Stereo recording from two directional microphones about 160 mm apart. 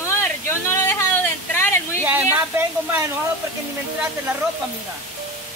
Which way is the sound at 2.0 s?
10° right (ahead or behind).